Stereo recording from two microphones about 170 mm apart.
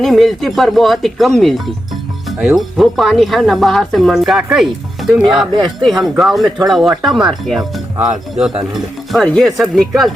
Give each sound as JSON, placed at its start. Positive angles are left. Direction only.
{"t": 0.0, "sound": "speech", "side_deg": 0}